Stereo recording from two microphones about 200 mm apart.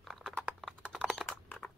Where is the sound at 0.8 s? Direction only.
5° left (ahead or behind).